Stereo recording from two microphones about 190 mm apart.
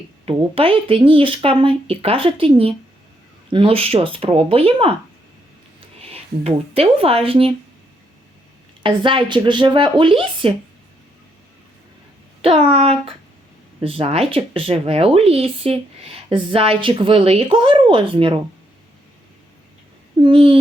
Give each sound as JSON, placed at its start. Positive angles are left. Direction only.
{"t": 0.3, "sound": "speech", "side_deg": -30}
{"t": 6.0, "sound": "speech", "side_deg": -30}
{"t": 8.8, "sound": "speech", "side_deg": -25}
{"t": 12.4, "sound": "speech", "side_deg": -30}
{"t": 20.1, "sound": "speech", "side_deg": -30}